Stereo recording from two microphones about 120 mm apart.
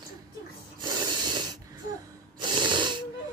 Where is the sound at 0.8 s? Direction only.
35° right (ahead or behind).